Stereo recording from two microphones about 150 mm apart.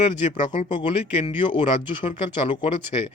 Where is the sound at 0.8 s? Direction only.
35° left (ahead or behind).